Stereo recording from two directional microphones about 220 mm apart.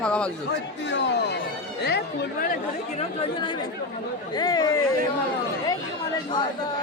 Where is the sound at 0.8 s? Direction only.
55° left (ahead or behind); by 4.8 s 15° left (ahead or behind).